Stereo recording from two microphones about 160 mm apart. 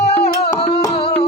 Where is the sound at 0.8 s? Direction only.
35° left (ahead or behind).